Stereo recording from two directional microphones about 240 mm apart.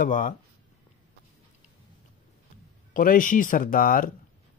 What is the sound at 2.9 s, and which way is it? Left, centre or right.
Speech, left.